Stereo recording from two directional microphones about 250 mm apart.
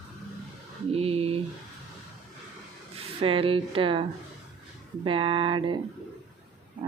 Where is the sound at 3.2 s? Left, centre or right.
Right.